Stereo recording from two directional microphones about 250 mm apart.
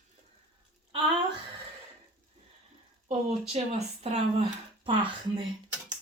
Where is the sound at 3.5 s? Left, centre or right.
Right.